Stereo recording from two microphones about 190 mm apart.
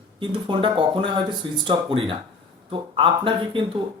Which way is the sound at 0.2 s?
25° right (ahead or behind).